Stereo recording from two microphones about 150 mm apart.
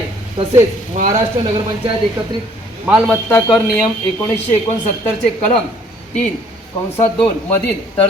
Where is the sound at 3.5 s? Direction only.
Centre (ahead or behind).